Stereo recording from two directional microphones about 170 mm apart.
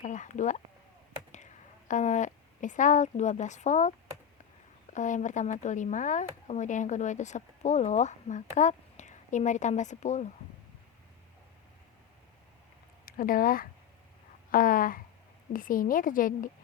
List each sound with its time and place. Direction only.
0.0 s a sound: 45° left (ahead or behind)
1.9 s speech: 45° left (ahead or behind)
4.9 s speech: 45° left (ahead or behind)
13.1 s speech: 55° left (ahead or behind)